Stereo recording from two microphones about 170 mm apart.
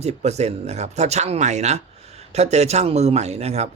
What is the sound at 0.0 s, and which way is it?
Speech, 40° right (ahead or behind).